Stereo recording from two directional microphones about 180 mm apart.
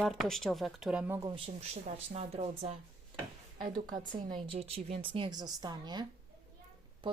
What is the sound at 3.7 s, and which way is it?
A woman's voice, 25° right (ahead or behind).